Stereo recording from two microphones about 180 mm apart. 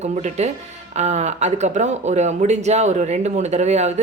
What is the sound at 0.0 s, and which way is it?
Speech, 40° right (ahead or behind).